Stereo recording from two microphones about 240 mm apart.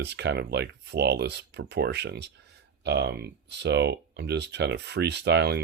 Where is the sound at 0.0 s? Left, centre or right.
Right.